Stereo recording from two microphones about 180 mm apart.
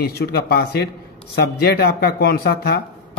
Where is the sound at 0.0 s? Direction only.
60° left (ahead or behind).